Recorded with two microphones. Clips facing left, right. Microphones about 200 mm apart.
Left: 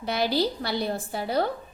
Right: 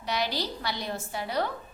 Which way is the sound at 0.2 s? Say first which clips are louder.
Left 6 dB; 30° left (ahead or behind).